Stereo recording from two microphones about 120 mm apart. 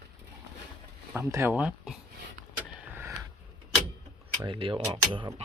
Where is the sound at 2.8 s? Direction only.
20° right (ahead or behind).